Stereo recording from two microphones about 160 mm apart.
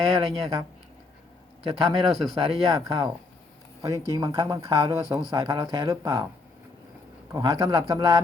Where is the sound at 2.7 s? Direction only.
20° right (ahead or behind).